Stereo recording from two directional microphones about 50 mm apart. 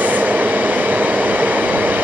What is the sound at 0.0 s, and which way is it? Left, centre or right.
Train, right.